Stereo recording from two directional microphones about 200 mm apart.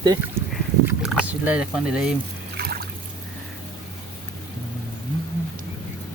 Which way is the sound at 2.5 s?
50° right (ahead or behind).